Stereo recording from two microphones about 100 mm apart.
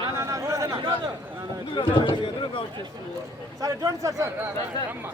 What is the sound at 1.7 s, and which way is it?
Speech, 55° left (ahead or behind).